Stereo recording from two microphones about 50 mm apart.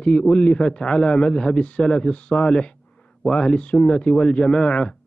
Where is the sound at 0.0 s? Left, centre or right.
Centre.